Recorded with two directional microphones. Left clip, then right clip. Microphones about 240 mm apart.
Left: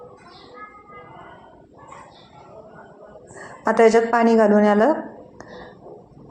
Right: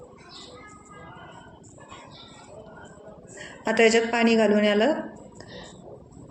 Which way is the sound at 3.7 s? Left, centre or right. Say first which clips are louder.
Left 5 dB; centre.